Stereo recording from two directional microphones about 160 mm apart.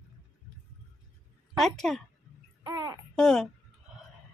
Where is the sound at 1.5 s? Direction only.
Centre (ahead or behind).